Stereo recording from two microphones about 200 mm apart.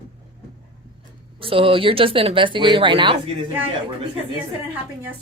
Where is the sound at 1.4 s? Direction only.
25° right (ahead or behind).